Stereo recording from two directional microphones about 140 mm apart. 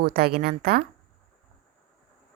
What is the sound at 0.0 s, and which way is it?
Speech, 90° right.